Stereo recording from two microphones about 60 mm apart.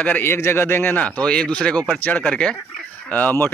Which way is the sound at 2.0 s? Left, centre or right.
Left.